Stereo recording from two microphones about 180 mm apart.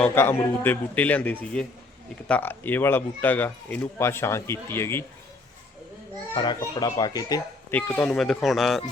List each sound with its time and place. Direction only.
0.0 s speech: 10° left (ahead or behind)
6.3 s a child's voice: 25° left (ahead or behind)
7.7 s speech: 10° left (ahead or behind)